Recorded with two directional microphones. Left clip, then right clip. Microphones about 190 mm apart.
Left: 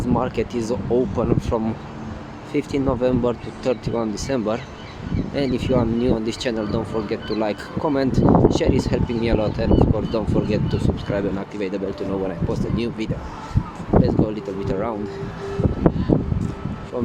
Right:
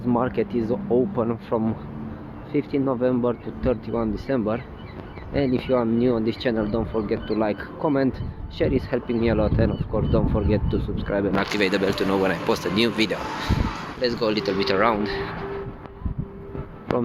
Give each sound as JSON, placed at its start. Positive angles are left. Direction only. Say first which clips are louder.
{"t": 0.1, "sound": "speech", "louder": "even", "side_deg": 10}